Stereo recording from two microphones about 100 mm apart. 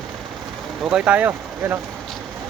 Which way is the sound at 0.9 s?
10° right (ahead or behind).